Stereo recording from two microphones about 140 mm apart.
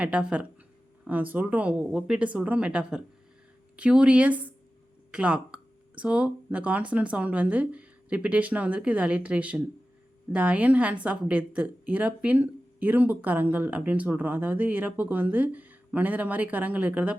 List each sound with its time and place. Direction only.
0.0 s a woman's voice: 10° right (ahead or behind)